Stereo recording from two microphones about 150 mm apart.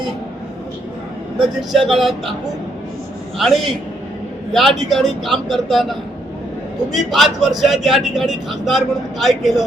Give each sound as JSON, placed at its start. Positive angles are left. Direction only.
{"t": 1.4, "sound": "speech", "side_deg": 0}
{"t": 3.3, "sound": "speech", "side_deg": 0}